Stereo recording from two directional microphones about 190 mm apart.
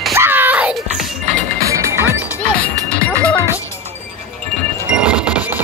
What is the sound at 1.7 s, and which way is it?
Music, 15° right (ahead or behind).